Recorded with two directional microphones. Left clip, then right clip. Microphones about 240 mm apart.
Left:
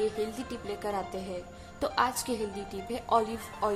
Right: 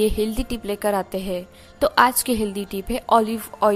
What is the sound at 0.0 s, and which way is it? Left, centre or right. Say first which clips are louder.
A woman's voice: right 9 dB; right.